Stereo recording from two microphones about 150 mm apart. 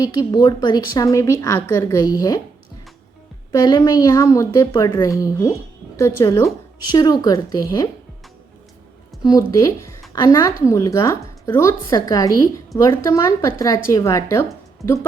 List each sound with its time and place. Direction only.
0.0 s speech: 25° left (ahead or behind)
3.5 s speech: 30° left (ahead or behind)
9.2 s speech: 25° left (ahead or behind)